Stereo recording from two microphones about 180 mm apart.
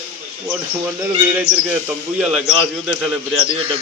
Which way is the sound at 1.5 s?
15° left (ahead or behind).